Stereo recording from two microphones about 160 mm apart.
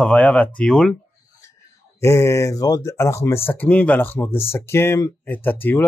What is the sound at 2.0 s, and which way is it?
Speech, 20° left (ahead or behind).